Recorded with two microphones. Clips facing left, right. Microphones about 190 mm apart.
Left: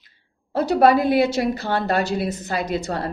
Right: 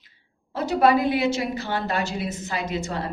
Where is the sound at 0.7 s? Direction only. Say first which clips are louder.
Left 3 dB; 35° left (ahead or behind).